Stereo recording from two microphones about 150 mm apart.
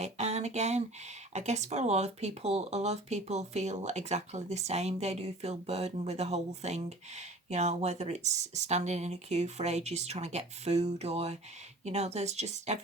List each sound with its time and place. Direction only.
0.0 s speech: 45° right (ahead or behind)